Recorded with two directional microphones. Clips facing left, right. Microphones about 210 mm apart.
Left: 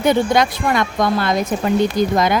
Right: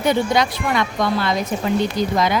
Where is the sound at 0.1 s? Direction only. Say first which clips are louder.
Left 2 dB; 50° left (ahead or behind).